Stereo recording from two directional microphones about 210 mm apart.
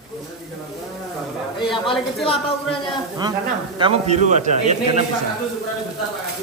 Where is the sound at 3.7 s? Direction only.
30° right (ahead or behind).